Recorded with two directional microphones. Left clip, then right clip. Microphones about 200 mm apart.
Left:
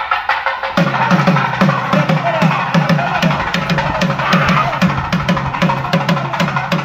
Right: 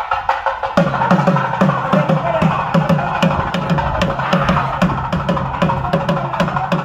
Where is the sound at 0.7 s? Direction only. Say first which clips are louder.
Even; 50° right (ahead or behind).